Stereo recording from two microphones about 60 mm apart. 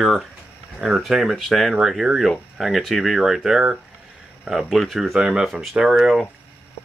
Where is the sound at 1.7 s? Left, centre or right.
Centre.